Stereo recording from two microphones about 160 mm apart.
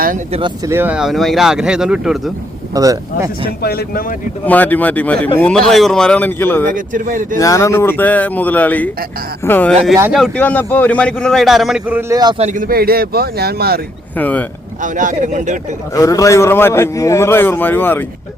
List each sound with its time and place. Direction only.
0.3 s speech: 30° right (ahead or behind)
0.7 s speech: 10° right (ahead or behind)
2.7 s speech: 20° right (ahead or behind)
3.6 s speech: 75° left (ahead or behind)
4.4 s a man's voice: 10° left (ahead or behind)
6.7 s speech: 55° right (ahead or behind)
7.3 s a man's voice: 20° left (ahead or behind); by 11.9 s centre (ahead or behind)
11.9 s speech: 20° right (ahead or behind)
12.4 s speech: 55° right (ahead or behind); by 13.8 s 75° right (ahead or behind)
14.2 s a man's voice: 10° left (ahead or behind)
14.8 s speech: 55° right (ahead or behind)
16.0 s a man's voice: 20° left (ahead or behind)